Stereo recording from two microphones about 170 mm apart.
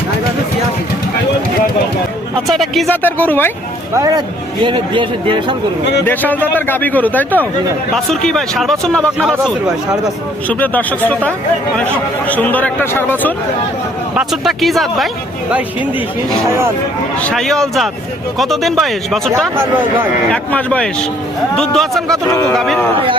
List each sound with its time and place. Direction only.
2.5 s a man's voice: centre (ahead or behind)
3.9 s a man's voice: 20° right (ahead or behind)
6.1 s a man's voice: 10° left (ahead or behind)
10.5 s a man's voice: 10° left (ahead or behind)
14.2 s speech: centre (ahead or behind)
17.2 s speech: 5° left (ahead or behind)
20.3 s a man's voice: 5° left (ahead or behind)